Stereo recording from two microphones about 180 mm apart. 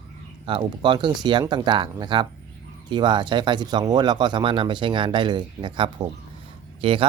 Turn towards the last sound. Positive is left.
turn(degrees=-30)  # may be behind; listen again after turning